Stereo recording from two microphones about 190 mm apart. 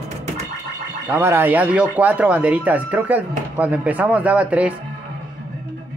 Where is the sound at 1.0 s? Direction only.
10° right (ahead or behind).